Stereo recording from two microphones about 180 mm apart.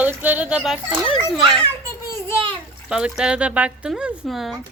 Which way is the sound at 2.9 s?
5° right (ahead or behind).